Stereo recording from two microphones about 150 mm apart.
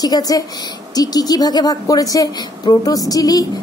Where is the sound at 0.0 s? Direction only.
25° left (ahead or behind).